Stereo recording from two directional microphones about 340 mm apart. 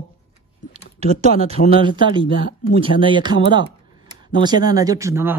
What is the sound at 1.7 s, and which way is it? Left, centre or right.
Speech, centre.